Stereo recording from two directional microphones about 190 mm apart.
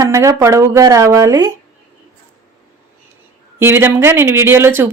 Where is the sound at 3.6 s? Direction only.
10° right (ahead or behind).